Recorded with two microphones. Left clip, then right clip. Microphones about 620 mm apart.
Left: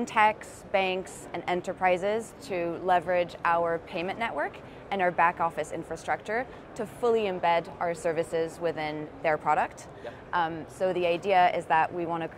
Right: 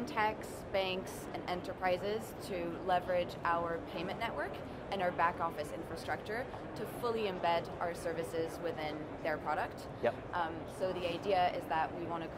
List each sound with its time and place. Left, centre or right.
0.0 s a woman's voice: left